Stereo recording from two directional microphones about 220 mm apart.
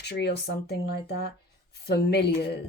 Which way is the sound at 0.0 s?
50° left (ahead or behind).